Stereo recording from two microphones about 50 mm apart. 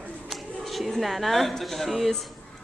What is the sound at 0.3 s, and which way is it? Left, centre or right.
A woman's voice, centre.